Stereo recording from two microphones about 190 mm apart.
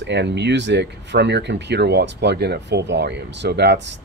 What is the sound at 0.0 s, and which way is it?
Speech, 65° right (ahead or behind).